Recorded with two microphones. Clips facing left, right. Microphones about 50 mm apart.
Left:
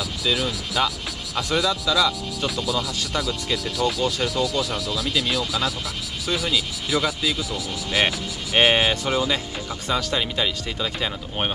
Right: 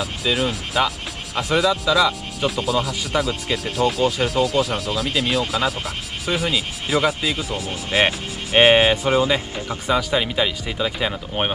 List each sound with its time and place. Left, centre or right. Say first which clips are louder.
0.0 s speech: right 3 dB; right
1.7 s speech: right 3 dB; centre
2.5 s speech: right 4 dB; right
8.5 s speech: right 5 dB; centre